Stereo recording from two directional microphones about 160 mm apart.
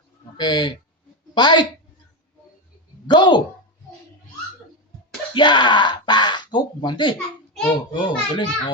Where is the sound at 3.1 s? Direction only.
30° left (ahead or behind).